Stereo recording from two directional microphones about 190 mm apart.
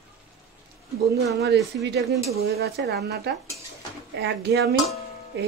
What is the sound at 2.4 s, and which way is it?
A woman's voice, 55° right (ahead or behind).